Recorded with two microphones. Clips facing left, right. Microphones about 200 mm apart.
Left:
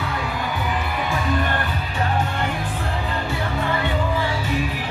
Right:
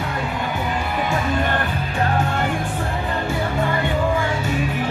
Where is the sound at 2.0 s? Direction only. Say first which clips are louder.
Right 2 dB; 45° right (ahead or behind).